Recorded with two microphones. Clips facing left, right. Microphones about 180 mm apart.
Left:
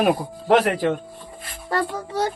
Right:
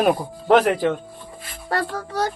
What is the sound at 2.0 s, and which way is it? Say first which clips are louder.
Speech: even; 25° left (ahead or behind).